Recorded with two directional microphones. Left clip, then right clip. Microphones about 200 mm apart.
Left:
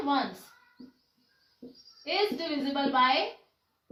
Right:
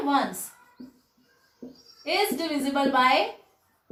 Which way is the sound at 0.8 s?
5° right (ahead or behind).